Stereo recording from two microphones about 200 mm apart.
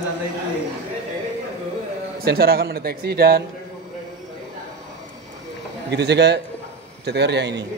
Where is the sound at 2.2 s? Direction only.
50° right (ahead or behind).